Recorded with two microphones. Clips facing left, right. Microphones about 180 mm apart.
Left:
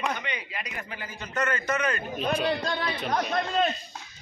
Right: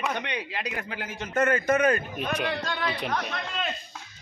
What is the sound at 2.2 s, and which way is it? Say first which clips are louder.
Speech: left 5 dB; 35° left (ahead or behind).